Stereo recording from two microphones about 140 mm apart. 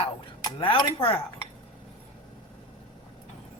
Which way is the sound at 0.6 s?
40° left (ahead or behind).